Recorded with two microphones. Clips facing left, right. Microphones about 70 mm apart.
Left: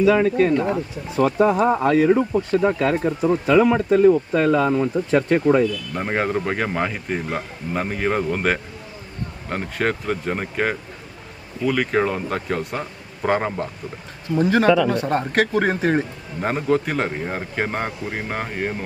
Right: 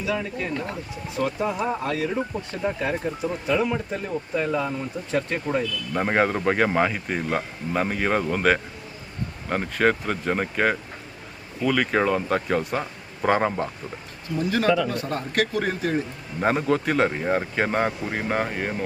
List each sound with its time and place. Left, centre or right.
0.1 s speech: left
5.9 s speech: centre
14.4 s speech: left
16.4 s speech: centre